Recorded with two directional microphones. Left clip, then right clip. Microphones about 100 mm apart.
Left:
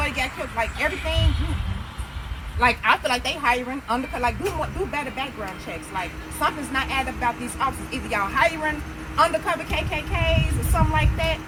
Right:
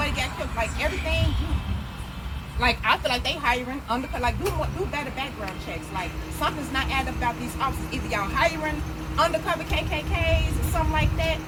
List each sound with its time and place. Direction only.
0.0 s vehicle: 15° left (ahead or behind)
1.0 s speech: 20° left (ahead or behind)
2.6 s speech: 10° left (ahead or behind)